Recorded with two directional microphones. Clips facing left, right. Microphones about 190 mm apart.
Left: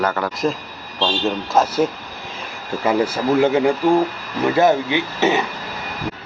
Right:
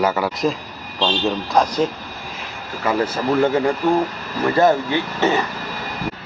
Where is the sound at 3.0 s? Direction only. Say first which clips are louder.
Even; 10° left (ahead or behind).